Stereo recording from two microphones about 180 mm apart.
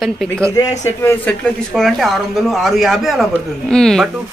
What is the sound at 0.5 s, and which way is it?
Speech, 15° left (ahead or behind).